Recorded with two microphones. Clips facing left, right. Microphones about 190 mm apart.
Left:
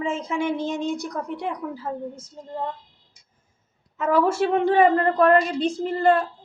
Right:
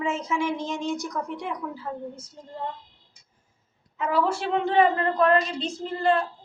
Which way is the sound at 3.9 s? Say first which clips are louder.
Left 4 dB; 45° left (ahead or behind).